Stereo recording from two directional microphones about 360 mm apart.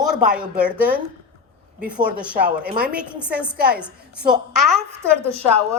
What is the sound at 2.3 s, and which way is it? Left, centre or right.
Speech, right.